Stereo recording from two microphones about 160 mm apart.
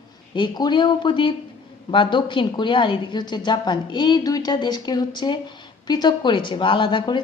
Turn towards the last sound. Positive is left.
turn(degrees=30)  # may be behind; listen again after turning